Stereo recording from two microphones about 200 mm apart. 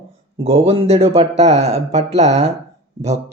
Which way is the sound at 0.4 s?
30° right (ahead or behind).